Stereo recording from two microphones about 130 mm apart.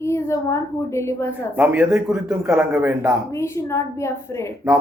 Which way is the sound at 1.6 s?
10° right (ahead or behind).